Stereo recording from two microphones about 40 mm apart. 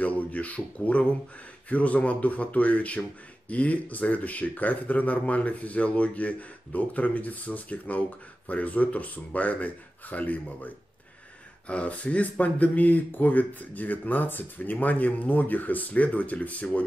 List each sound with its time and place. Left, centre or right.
0.0 s speech: left